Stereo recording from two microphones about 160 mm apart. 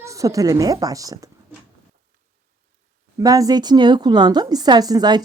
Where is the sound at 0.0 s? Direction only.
20° right (ahead or behind).